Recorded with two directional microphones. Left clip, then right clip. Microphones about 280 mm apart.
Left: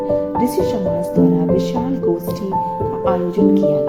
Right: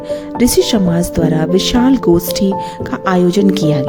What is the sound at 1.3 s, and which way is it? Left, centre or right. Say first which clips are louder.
Music: right 4 dB; right.